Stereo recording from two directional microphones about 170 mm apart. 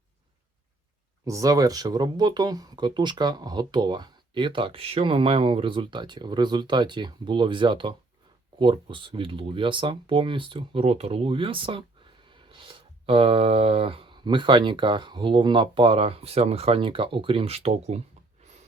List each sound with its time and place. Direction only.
1.2 s speech: 20° right (ahead or behind); by 18.0 s 35° right (ahead or behind)